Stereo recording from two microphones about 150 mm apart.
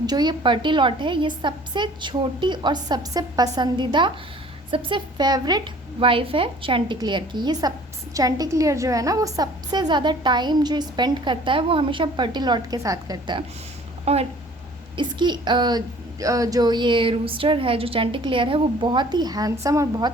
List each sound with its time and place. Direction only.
0.0 s a woman's voice: 30° right (ahead or behind)
14.0 s speech: 45° right (ahead or behind)
14.9 s a woman's voice: 30° right (ahead or behind)